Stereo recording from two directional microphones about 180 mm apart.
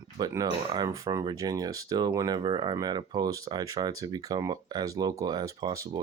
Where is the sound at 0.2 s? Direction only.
25° right (ahead or behind).